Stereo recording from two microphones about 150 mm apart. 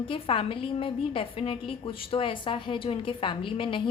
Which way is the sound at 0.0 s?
35° left (ahead or behind).